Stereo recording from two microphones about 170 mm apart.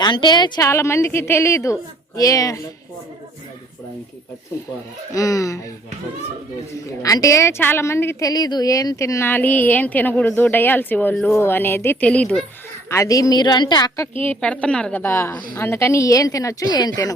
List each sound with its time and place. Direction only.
0.0 s a woman's voice: 25° left (ahead or behind)
5.1 s a woman's voice: 20° left (ahead or behind)
7.0 s a woman's voice: 20° left (ahead or behind)
12.9 s a woman's voice: 20° left (ahead or behind)
14.2 s a woman's voice: 10° left (ahead or behind)